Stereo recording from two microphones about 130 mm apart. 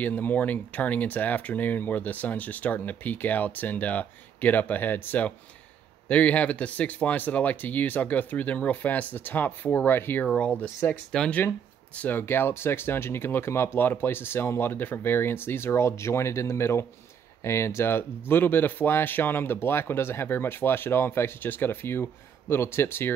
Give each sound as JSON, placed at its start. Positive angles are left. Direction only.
{"t": 0.0, "sound": "speech", "side_deg": 15}